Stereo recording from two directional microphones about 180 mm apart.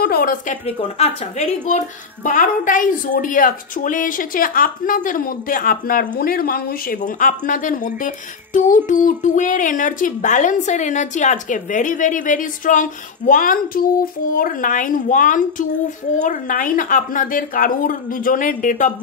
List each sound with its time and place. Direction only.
0.0 s a woman's voice: 55° left (ahead or behind)
0.7 s a woman's voice: 35° left (ahead or behind)